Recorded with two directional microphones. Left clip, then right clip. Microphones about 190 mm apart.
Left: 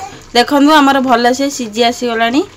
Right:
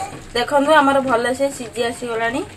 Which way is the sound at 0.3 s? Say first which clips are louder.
Left 6 dB; 55° left (ahead or behind).